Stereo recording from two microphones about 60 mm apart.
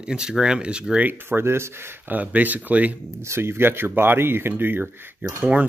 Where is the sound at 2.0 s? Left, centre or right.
Right.